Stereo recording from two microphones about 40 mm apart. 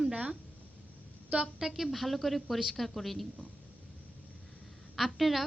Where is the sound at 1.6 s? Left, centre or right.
Centre.